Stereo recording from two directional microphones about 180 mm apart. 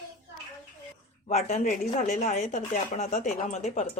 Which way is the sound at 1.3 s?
35° left (ahead or behind).